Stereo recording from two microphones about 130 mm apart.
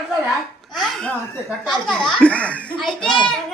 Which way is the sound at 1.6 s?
5° left (ahead or behind).